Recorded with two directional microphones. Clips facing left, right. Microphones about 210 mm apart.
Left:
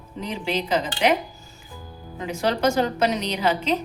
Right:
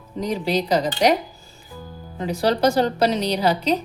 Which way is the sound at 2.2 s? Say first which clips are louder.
Right 3 dB; 35° right (ahead or behind).